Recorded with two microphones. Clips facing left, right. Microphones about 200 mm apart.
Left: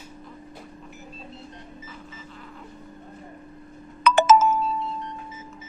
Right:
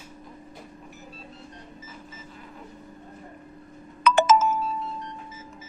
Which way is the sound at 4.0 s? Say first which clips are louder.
Left 2 dB; 65° left (ahead or behind).